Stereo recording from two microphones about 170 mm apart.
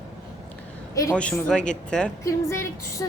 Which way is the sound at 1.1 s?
5° left (ahead or behind).